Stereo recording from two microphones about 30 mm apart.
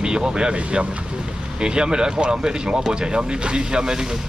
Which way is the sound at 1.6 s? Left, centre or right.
Right.